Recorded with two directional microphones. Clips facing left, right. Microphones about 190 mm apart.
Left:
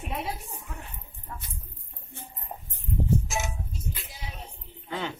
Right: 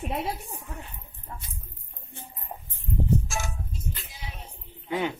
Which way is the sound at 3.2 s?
20° left (ahead or behind).